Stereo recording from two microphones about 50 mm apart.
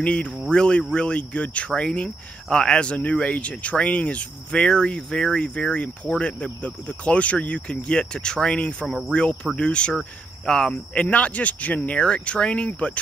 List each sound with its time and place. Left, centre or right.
0.0 s speech: left
9.9 s speech: centre
10.7 s speech: left
12.0 s speech: centre